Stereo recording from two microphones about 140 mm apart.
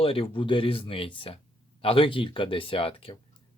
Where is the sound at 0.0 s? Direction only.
40° left (ahead or behind).